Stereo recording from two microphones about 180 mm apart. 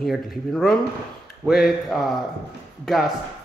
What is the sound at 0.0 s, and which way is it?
A man's voice, centre (ahead or behind).